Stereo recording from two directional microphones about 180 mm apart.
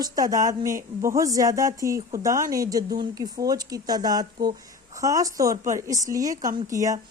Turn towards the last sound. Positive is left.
turn(degrees=-20)  # may be behind; listen again after turning